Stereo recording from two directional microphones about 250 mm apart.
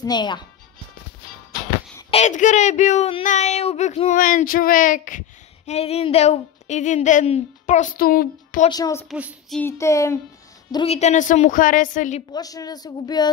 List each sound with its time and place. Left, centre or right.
0.0 s speech: centre
2.0 s speech: left
8.6 s speech: centre
9.1 s child singing: centre
9.6 s speech: centre
10.7 s speech: left
12.3 s speech: centre